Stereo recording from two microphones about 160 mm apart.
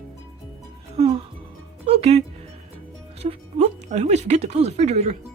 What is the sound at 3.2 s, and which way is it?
Speech, 40° right (ahead or behind).